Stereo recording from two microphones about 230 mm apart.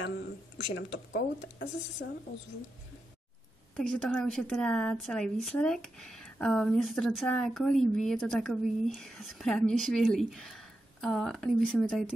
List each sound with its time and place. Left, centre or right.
0.9 s speech: left
3.7 s a woman's voice: centre